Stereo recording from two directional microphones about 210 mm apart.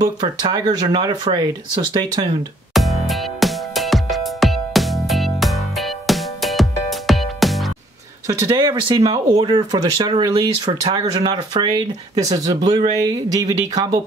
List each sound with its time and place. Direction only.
0.0 s speech: 20° right (ahead or behind)
2.7 s music: centre (ahead or behind)
8.3 s speech: 20° right (ahead or behind)